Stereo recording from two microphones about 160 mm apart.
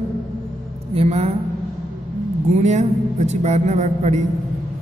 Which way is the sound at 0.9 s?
40° right (ahead or behind).